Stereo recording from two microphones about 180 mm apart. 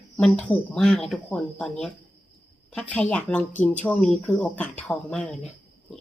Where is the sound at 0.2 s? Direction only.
5° left (ahead or behind).